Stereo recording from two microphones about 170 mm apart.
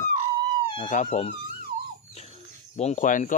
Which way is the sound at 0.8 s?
45° left (ahead or behind).